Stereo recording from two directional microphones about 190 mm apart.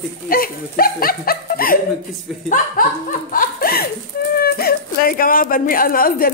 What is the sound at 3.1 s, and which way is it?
Speech, 50° left (ahead or behind).